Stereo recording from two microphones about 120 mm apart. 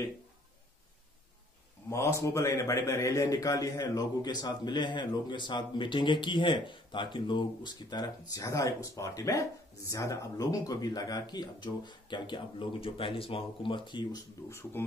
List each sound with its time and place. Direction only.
1.9 s a man's voice: 25° left (ahead or behind); by 14.2 s 40° left (ahead or behind)
14.5 s speech: 20° left (ahead or behind)